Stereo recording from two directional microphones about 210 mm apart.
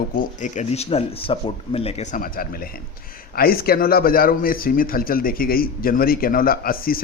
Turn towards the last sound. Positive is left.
turn(degrees=45)  # may be behind; listen again after turning